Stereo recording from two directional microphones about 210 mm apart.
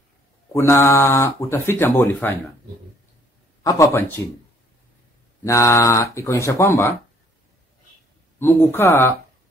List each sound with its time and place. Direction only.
0.5 s speech: 15° left (ahead or behind)
3.6 s speech: 15° left (ahead or behind)
5.4 s speech: 15° left (ahead or behind)
8.4 s speech: 10° left (ahead or behind)